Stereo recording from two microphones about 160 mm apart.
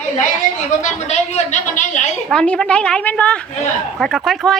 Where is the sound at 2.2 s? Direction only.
5° left (ahead or behind).